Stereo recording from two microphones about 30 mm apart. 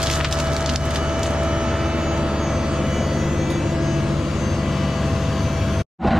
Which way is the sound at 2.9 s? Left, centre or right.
Centre.